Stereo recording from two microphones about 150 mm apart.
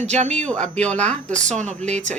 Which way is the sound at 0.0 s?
50° right (ahead or behind).